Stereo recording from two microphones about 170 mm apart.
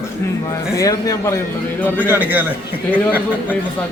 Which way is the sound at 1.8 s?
10° left (ahead or behind).